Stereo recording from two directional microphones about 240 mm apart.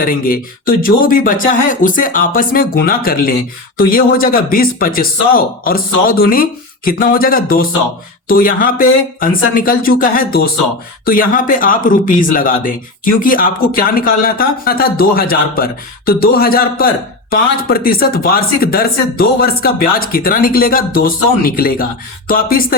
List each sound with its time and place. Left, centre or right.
0.0 s speech: left